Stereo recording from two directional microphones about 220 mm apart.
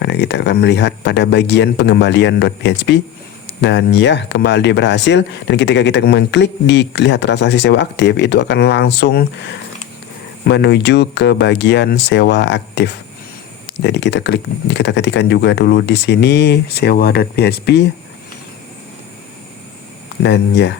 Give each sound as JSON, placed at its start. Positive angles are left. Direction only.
{"t": 0.0, "sound": "speech", "side_deg": 50}
{"t": 20.2, "sound": "speech", "side_deg": 55}